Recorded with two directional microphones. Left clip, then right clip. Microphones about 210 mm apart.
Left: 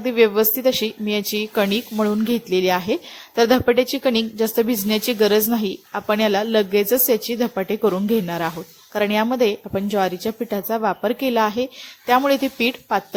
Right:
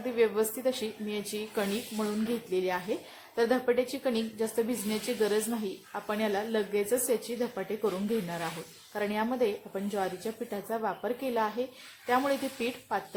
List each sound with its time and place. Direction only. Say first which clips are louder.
0.0 s a woman's voice: left 11 dB; 35° left (ahead or behind)